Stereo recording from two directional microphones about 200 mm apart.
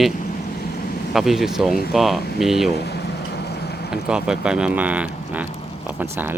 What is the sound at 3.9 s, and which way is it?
Speech, 5° right (ahead or behind).